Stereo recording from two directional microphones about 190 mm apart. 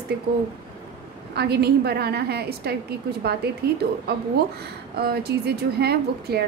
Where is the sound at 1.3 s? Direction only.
60° right (ahead or behind).